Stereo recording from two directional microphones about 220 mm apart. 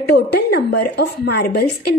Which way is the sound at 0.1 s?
45° left (ahead or behind).